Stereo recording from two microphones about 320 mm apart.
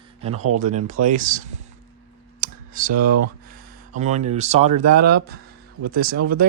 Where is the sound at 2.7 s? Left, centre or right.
Right.